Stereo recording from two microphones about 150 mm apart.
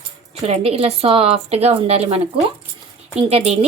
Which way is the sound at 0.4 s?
40° right (ahead or behind).